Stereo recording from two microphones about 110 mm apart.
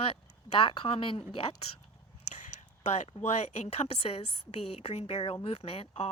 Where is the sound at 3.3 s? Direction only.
80° left.